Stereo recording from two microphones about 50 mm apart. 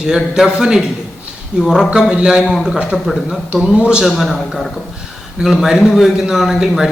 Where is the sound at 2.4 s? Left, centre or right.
Centre.